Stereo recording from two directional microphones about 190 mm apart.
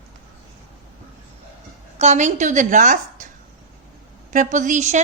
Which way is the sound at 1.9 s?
40° right (ahead or behind).